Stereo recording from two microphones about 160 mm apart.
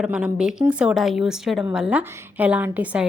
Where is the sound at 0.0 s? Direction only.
5° right (ahead or behind).